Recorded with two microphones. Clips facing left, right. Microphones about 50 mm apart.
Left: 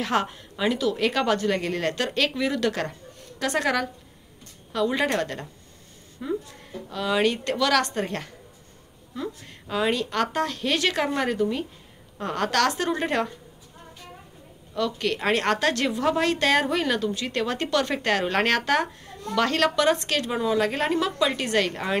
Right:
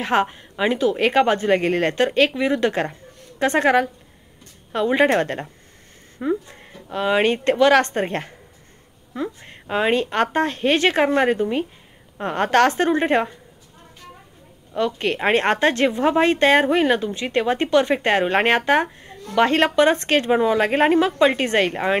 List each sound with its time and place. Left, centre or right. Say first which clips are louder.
0.0 s a woman's voice: right 5 dB; right
14.7 s a woman's voice: right 4 dB; right